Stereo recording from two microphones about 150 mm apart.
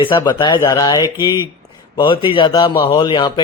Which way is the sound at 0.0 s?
30° left (ahead or behind).